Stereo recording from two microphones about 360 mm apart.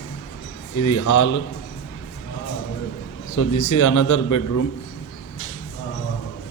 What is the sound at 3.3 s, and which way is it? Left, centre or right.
A man's voice, left.